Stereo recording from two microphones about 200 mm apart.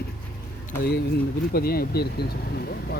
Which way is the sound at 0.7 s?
50° left (ahead or behind).